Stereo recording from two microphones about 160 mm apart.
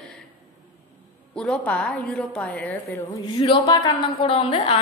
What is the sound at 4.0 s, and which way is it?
Speech, 35° left (ahead or behind).